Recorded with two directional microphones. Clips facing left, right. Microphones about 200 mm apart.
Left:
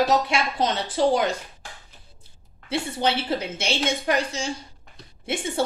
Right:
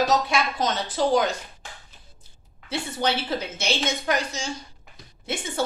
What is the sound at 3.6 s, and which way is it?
Speech, 30° left (ahead or behind).